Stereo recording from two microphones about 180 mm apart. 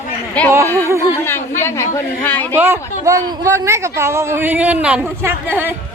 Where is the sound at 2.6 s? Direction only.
15° right (ahead or behind).